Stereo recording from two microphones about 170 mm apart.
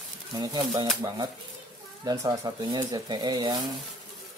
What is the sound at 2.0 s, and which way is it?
Speech, 20° right (ahead or behind).